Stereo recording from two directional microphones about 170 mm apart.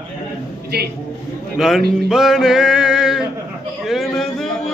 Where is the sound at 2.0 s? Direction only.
Centre (ahead or behind).